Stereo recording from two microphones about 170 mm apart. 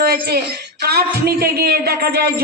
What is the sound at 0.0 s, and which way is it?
Speech, 65° right (ahead or behind).